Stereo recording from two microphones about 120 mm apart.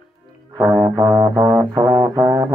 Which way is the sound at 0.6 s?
15° right (ahead or behind).